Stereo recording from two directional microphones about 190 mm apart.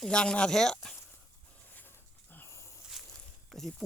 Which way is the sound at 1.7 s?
10° left (ahead or behind).